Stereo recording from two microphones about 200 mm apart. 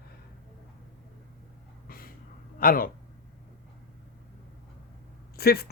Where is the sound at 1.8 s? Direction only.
45° left (ahead or behind).